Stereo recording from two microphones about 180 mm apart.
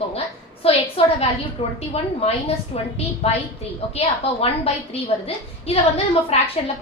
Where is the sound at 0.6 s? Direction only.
30° left (ahead or behind).